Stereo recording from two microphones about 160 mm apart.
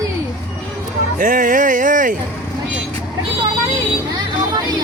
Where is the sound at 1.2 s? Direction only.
55° right (ahead or behind).